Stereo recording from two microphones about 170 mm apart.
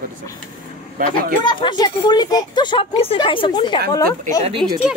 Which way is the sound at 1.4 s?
25° left (ahead or behind).